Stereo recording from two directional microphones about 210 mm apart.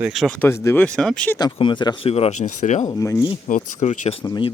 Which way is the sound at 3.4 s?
35° left (ahead or behind).